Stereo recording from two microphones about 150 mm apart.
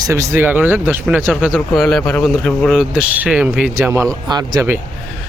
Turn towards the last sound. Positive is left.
turn(degrees=-25)  # may be behind; listen again after turning